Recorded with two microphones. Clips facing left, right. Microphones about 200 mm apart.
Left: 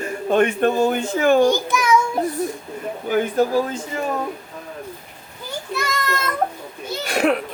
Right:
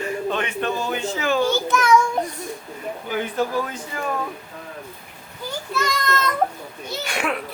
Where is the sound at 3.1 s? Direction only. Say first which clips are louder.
Left 6 dB; 45° left (ahead or behind); by 4.0 s 30° left (ahead or behind).